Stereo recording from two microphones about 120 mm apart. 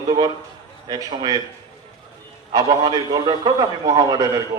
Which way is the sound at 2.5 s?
35° right (ahead or behind).